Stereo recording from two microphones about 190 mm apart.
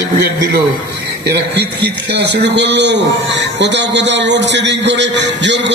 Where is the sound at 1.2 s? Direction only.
65° right (ahead or behind).